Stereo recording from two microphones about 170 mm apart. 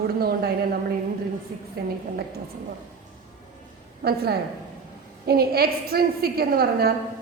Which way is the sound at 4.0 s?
65° right (ahead or behind).